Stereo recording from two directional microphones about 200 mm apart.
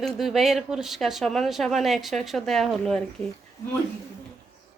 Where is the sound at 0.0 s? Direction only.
Centre (ahead or behind).